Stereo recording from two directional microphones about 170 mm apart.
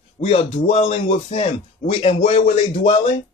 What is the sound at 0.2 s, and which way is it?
A man's voice, 35° left (ahead or behind).